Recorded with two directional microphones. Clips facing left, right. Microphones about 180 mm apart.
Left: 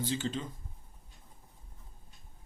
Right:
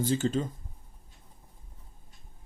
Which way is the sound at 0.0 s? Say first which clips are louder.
Right 7 dB; 45° right (ahead or behind).